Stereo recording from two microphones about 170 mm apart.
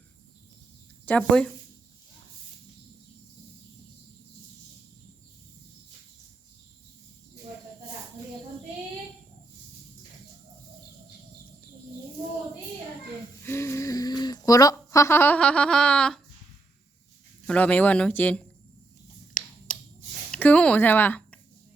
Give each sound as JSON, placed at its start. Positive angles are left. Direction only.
{"t": 1.0, "sound": "speech", "side_deg": 5}
{"t": 13.4, "sound": "a sound", "side_deg": 15}
{"t": 17.4, "sound": "speech", "side_deg": 5}
{"t": 20.3, "sound": "speech", "side_deg": 10}